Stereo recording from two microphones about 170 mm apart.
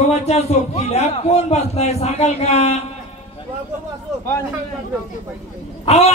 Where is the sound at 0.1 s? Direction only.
40° left (ahead or behind).